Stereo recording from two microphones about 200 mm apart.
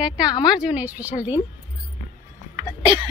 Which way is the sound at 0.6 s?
5° right (ahead or behind).